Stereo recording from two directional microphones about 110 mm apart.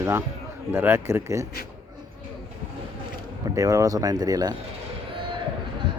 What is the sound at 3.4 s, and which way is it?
Speech, 30° right (ahead or behind).